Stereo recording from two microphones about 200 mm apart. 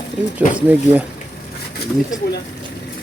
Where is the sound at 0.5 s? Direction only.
10° right (ahead or behind).